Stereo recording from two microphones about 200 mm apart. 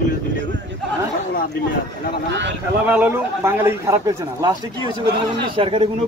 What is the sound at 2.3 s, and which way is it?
Speech, 60° right (ahead or behind).